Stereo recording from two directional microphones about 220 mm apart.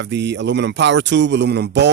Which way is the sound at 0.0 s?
50° right (ahead or behind).